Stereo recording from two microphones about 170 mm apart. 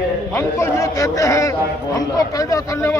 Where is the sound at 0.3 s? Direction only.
15° left (ahead or behind).